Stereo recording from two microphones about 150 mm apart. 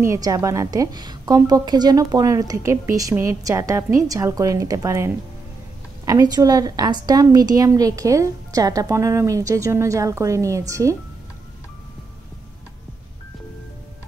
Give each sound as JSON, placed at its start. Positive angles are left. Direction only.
{"t": 0.0, "sound": "a woman's voice", "side_deg": -20}